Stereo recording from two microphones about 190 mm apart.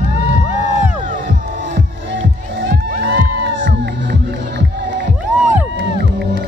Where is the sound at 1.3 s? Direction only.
60° right (ahead or behind).